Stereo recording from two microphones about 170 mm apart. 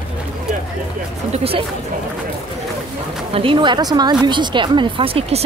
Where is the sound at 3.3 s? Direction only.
30° right (ahead or behind).